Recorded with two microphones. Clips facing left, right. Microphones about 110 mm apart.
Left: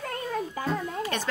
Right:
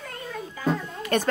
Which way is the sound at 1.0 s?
50° right (ahead or behind).